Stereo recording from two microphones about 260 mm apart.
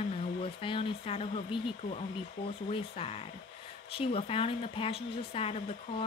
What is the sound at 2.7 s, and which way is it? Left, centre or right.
A woman's voice, left.